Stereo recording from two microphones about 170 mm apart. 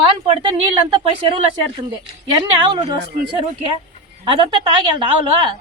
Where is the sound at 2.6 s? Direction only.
30° right (ahead or behind).